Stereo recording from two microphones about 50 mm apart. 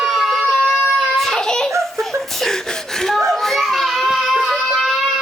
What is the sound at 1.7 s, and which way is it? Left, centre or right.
Giggle, right.